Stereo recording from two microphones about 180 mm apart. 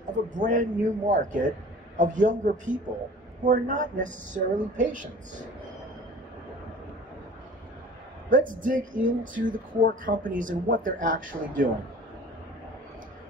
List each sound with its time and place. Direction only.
0.3 s a woman's voice: 45° right (ahead or behind)
8.3 s a woman's voice: 50° right (ahead or behind)